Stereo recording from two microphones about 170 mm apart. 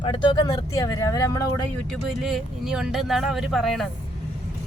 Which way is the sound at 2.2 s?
5° right (ahead or behind).